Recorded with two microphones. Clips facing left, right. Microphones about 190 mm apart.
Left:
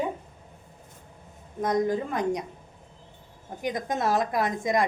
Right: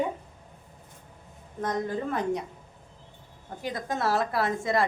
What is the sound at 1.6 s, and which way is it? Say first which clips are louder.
Speech: left 4 dB; 15° left (ahead or behind).